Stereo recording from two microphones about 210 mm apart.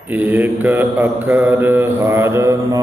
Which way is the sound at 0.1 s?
10° right (ahead or behind).